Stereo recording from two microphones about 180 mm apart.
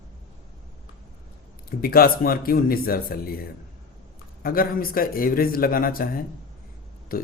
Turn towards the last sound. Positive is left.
turn(degrees=55)  # may be behind; listen again after turning